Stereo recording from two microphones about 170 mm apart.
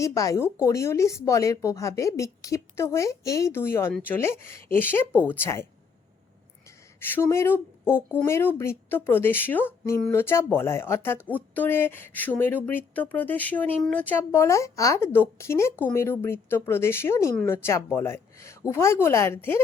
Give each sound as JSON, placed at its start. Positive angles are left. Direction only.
{"t": 0.0, "sound": "speech", "side_deg": 20}
{"t": 6.7, "sound": "speech", "side_deg": 15}